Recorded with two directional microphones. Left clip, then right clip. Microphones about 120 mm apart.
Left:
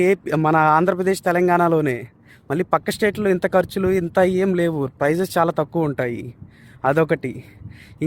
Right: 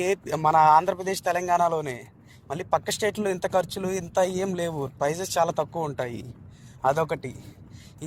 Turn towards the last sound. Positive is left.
turn(degrees=55)  # may be behind; listen again after turning